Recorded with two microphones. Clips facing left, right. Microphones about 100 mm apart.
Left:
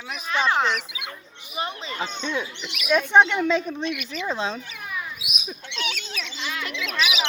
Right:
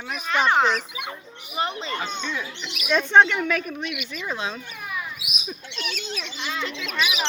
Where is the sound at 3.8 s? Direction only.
45° left (ahead or behind).